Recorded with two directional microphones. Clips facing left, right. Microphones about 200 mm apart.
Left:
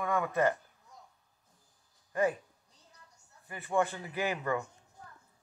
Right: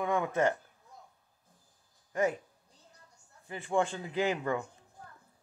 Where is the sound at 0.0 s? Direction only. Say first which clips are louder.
Right 1 dB; 20° right (ahead or behind).